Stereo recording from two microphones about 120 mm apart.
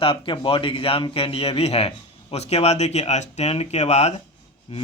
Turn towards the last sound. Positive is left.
turn(degrees=50)  # may be behind; listen again after turning